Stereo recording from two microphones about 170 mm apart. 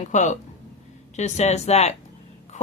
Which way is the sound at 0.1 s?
45° left (ahead or behind).